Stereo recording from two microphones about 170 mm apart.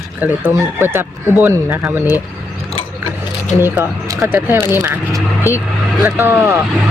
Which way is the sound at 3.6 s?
15° right (ahead or behind).